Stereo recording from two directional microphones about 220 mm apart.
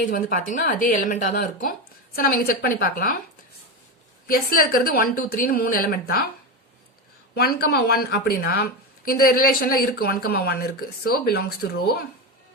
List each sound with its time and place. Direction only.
0.0 s a woman's voice: 40° left (ahead or behind)
4.3 s a woman's voice: 40° left (ahead or behind)
7.3 s speech: 45° left (ahead or behind)